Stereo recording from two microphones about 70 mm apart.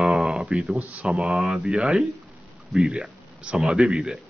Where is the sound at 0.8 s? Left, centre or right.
Centre.